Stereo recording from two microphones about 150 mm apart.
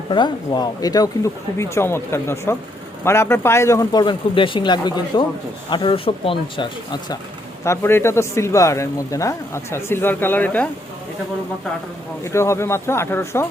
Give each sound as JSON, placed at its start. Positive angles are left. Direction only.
{"t": 0.1, "sound": "speech", "side_deg": 30}
{"t": 7.6, "sound": "speech", "side_deg": 15}
{"t": 12.2, "sound": "speech", "side_deg": 20}